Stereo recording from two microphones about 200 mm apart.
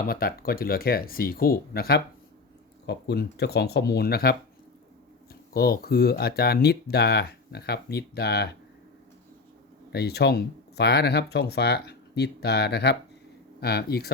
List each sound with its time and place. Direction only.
0.1 s speech: 50° left (ahead or behind)
9.9 s speech: 55° left (ahead or behind)